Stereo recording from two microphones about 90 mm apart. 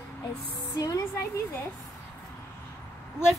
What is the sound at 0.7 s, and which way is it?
Speech, 40° left (ahead or behind).